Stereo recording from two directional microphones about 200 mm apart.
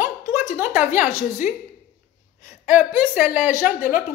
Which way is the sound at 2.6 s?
10° right (ahead or behind).